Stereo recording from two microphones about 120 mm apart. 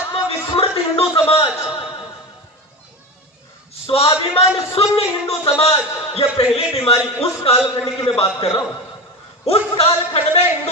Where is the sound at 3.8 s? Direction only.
55° left (ahead or behind).